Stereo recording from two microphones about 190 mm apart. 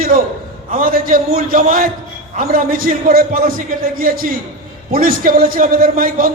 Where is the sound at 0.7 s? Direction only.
50° right (ahead or behind).